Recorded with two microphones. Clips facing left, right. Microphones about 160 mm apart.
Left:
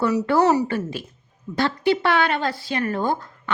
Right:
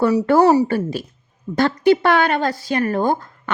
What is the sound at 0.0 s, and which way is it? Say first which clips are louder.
Speech: right 5 dB; 40° right (ahead or behind).